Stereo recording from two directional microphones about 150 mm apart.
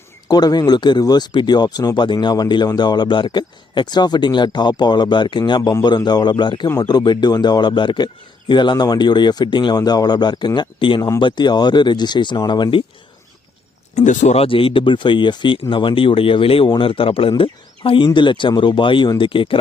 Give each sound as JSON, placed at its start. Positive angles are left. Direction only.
{"t": 0.3, "sound": "speech", "side_deg": 25}
{"t": 13.9, "sound": "speech", "side_deg": 55}